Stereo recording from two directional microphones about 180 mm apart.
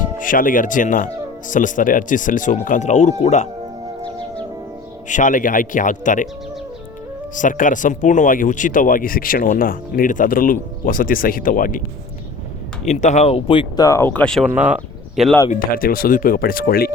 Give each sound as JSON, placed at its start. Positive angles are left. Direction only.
{"t": 0.2, "sound": "speech", "side_deg": 50}
{"t": 5.0, "sound": "speech", "side_deg": 45}
{"t": 7.3, "sound": "speech", "side_deg": 45}
{"t": 12.9, "sound": "speech", "side_deg": 40}
{"t": 14.5, "sound": "speech", "side_deg": -5}
{"t": 15.7, "sound": "speech", "side_deg": 55}